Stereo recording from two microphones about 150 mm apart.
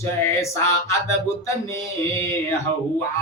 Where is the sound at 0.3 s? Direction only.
20° left (ahead or behind).